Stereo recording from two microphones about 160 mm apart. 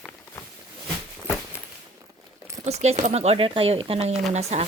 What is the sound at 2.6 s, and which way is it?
Speech, 40° right (ahead or behind).